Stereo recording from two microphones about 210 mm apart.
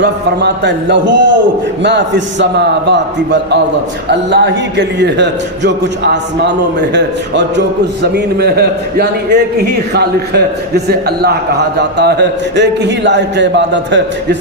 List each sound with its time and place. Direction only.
0.0 s a man's voice: 55° right (ahead or behind)